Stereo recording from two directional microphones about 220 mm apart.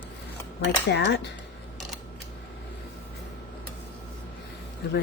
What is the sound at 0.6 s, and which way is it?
Speech, 55° left (ahead or behind).